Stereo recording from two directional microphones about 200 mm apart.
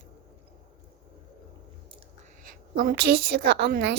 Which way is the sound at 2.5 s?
45° right (ahead or behind).